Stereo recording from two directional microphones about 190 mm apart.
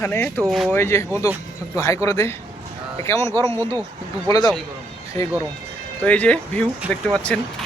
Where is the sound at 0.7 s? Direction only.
15° left (ahead or behind).